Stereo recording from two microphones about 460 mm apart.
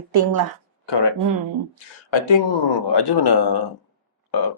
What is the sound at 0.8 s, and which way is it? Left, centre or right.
Speech, left.